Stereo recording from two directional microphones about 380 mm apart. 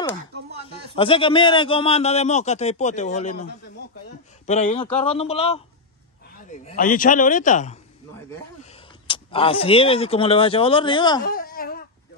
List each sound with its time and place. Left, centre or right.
0.7 s a man's voice: centre
4.5 s a man's voice: centre
9.0 s a man's voice: centre
11.2 s baby cry: left